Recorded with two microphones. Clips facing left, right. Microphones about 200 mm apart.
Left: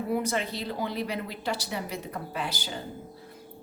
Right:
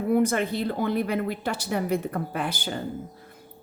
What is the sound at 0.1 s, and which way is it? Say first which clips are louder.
Speech: right 8 dB; 55° right (ahead or behind).